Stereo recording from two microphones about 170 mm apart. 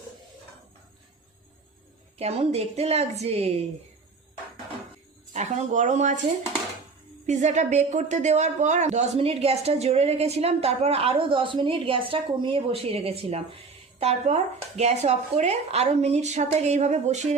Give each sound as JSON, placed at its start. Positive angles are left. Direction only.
{"t": 2.1, "sound": "a man's voice", "side_deg": -40}
{"t": 5.3, "sound": "speech", "side_deg": -45}
{"t": 7.3, "sound": "a man's voice", "side_deg": -45}